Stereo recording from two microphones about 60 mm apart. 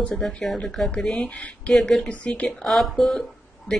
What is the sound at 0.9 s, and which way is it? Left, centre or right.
Speech, centre.